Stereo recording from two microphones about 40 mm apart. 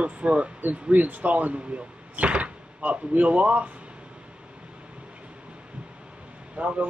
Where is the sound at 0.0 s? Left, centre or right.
Right.